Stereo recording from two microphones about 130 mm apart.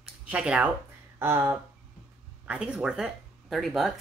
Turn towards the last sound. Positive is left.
turn(degrees=0)  # may be behind; listen again after turning